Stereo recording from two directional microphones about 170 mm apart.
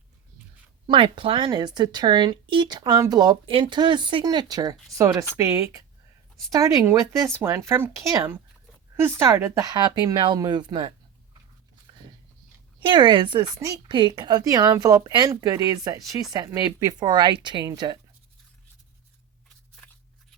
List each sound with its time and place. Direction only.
0.9 s speech: 30° right (ahead or behind)
12.8 s speech: 25° right (ahead or behind)